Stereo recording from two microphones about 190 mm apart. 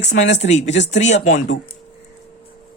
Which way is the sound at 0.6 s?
70° left (ahead or behind).